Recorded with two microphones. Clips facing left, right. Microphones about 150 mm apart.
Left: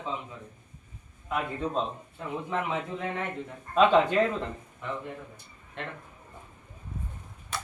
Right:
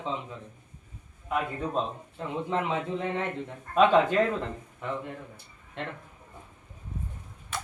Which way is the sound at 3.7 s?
5° right (ahead or behind).